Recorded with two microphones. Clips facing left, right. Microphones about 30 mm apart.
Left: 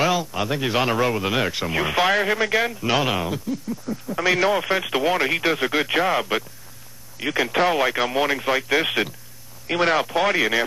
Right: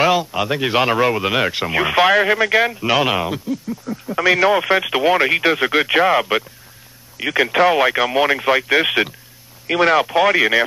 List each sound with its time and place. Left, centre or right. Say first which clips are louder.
0.0 s a sound: right 5 dB; right
0.4 s speech: right 4 dB; centre
4.2 s speech: right 5 dB; centre
4.5 s speech: right 5 dB; centre
8.1 s speech: right 5 dB; centre
9.7 s speech: right 5 dB; centre